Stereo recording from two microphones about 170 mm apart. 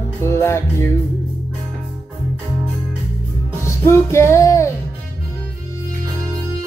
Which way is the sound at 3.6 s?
15° left (ahead or behind).